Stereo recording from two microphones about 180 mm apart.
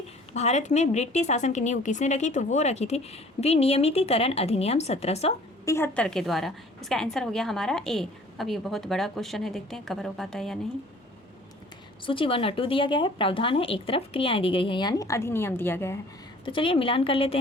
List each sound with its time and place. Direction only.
0.3 s a woman's voice: 40° left (ahead or behind)
5.6 s a woman's voice: 15° left (ahead or behind)
12.0 s a woman's voice: 30° left (ahead or behind); by 16.0 s 15° left (ahead or behind)
16.5 s a woman's voice: 30° left (ahead or behind)